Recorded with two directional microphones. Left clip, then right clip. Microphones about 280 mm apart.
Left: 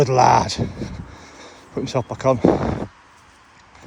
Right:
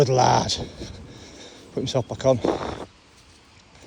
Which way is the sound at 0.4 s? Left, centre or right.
Centre.